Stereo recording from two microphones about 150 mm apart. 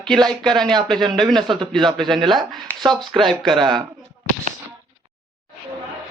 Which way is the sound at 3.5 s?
30° right (ahead or behind).